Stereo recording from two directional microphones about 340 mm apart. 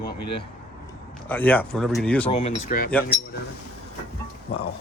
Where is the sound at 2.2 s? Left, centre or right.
Centre.